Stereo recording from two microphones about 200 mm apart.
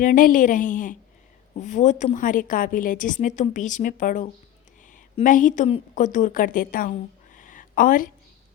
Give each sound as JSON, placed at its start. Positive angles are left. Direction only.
{"t": 0.0, "sound": "a woman's voice", "side_deg": 40}